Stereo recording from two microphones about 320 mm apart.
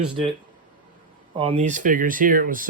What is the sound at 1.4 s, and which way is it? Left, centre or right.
Speech, centre.